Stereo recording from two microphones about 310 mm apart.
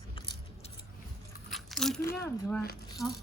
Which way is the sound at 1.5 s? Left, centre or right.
Centre.